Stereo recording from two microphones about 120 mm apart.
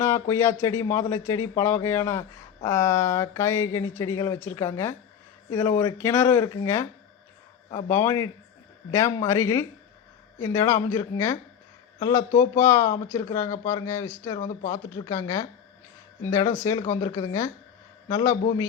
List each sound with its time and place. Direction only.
0.0 s speech: 20° left (ahead or behind)